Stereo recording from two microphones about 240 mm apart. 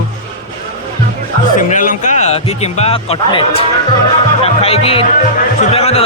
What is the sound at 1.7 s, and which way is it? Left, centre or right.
Speech, left.